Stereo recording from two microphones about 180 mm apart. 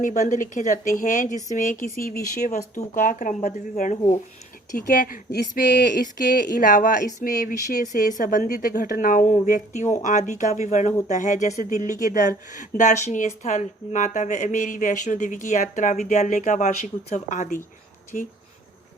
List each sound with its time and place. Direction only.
0.0 s speech: 45° left (ahead or behind)
4.7 s speech: 50° left (ahead or behind)